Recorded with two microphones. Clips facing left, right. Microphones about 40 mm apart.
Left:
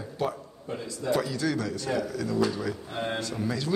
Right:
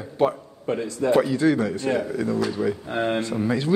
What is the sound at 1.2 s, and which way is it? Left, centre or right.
Speech, right.